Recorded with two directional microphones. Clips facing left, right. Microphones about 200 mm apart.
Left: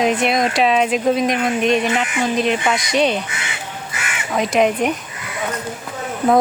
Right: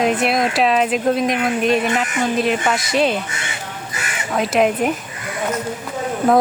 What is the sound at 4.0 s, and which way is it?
Crow, 35° right (ahead or behind).